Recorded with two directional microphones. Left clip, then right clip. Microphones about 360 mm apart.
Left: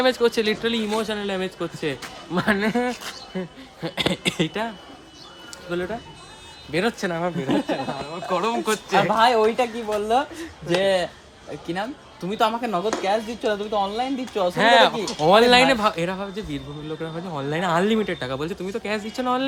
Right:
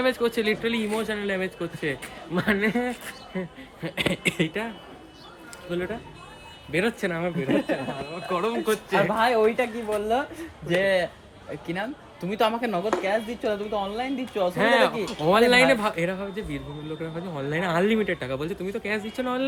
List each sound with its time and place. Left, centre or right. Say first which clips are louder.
0.0 s speech: left 4 dB; centre
5.7 s speech: left 3 dB; centre
8.3 s speech: left 2 dB; centre
9.0 s speech: left 4 dB; centre
14.5 s speech: left 6 dB; left